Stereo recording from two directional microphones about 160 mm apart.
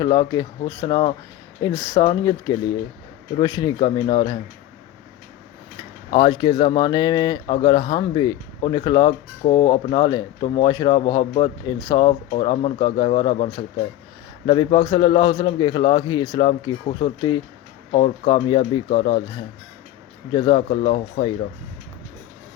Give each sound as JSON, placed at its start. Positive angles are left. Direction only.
{"t": 0.0, "sound": "speech", "side_deg": 25}
{"t": 6.1, "sound": "speech", "side_deg": 30}
{"t": 20.3, "sound": "speech", "side_deg": 30}